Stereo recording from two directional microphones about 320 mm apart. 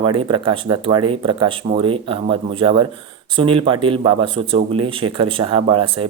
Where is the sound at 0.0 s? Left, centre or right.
Centre.